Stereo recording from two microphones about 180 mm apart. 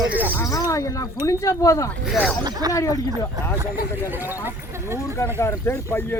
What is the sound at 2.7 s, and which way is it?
Speech, 20° left (ahead or behind).